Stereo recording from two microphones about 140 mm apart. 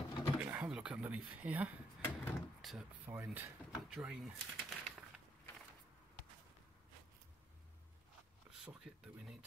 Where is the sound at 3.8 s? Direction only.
5° right (ahead or behind).